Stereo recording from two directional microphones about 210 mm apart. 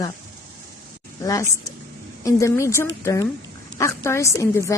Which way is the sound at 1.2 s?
15° left (ahead or behind).